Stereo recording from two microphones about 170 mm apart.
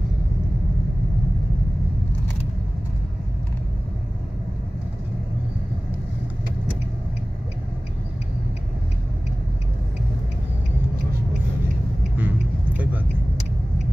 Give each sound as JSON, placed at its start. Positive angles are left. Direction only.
{"t": 12.2, "sound": "vehicle", "side_deg": -10}